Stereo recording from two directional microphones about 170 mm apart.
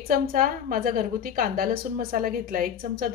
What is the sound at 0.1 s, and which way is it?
A woman's voice, 55° right (ahead or behind).